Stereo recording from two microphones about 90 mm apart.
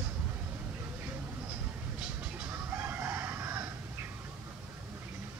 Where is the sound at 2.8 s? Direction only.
25° right (ahead or behind).